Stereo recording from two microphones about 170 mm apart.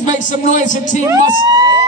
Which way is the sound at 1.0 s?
20° right (ahead or behind).